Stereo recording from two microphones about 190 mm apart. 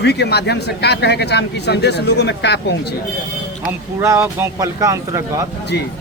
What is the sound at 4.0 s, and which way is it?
Speech, 15° right (ahead or behind).